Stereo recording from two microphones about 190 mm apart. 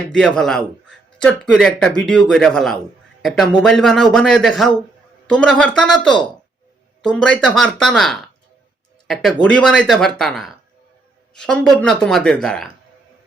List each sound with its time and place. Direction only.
0.1 s a man's voice: 5° left (ahead or behind)